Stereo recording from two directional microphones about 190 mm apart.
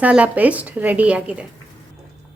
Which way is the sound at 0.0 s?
5° right (ahead or behind).